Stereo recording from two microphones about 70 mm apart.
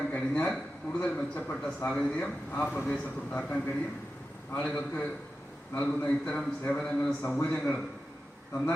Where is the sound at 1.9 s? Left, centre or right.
Centre.